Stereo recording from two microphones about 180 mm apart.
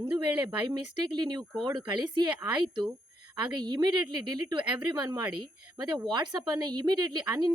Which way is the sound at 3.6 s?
20° right (ahead or behind).